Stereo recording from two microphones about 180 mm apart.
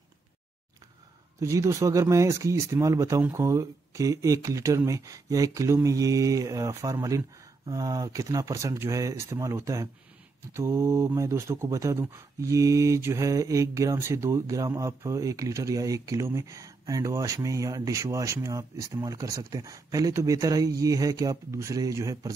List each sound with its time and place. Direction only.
1.4 s speech: 15° right (ahead or behind)